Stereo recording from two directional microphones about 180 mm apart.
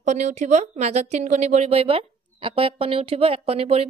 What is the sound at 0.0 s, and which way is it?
Speech, 40° right (ahead or behind).